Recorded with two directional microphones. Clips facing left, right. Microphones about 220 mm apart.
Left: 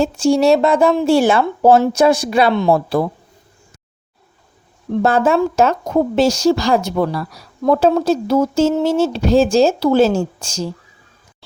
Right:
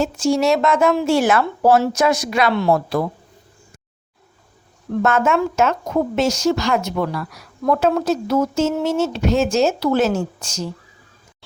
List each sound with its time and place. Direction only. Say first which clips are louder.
0.0 s a woman's voice: left 4 dB; 30° left (ahead or behind)
2.6 s speech: left 2 dB; 20° left (ahead or behind)
4.9 s a woman's voice: left 3 dB; 30° left (ahead or behind)